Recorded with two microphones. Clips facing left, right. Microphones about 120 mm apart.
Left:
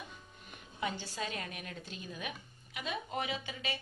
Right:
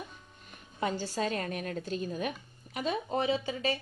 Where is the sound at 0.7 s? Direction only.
40° right (ahead or behind).